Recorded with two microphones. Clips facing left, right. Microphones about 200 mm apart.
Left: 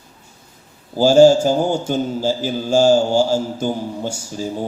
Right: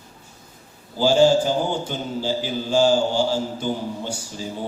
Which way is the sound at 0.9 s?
45° left (ahead or behind).